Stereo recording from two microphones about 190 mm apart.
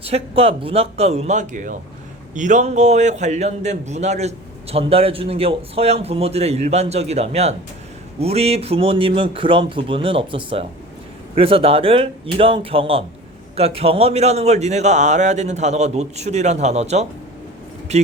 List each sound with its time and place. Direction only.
0.0 s a man's voice: 30° right (ahead or behind)